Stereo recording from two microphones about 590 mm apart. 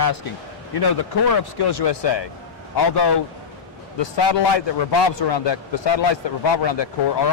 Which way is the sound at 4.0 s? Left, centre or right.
Left.